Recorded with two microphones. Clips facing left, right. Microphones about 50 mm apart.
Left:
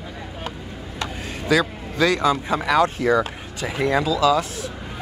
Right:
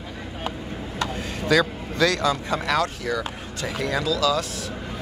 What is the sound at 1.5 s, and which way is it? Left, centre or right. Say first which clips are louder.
Speech: left 1 dB; centre.